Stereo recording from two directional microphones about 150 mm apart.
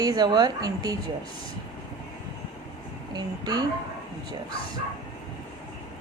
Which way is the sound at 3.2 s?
25° right (ahead or behind).